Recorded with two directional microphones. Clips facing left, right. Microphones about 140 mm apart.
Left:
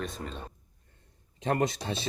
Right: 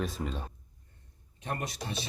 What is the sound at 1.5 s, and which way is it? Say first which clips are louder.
Speech: left 8 dB; 90° left.